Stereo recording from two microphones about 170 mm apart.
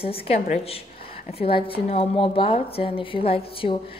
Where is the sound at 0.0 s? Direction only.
35° left (ahead or behind).